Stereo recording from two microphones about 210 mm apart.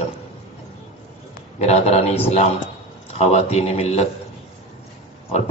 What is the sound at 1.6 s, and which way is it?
Speech, 30° left (ahead or behind).